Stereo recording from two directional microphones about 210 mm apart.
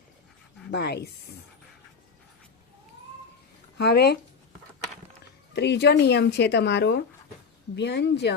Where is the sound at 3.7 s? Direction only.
50° left (ahead or behind).